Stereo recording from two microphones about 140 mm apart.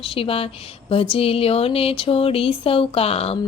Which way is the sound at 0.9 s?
40° left (ahead or behind).